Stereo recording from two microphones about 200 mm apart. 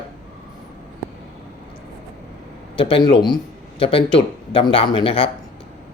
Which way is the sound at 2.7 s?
25° left (ahead or behind).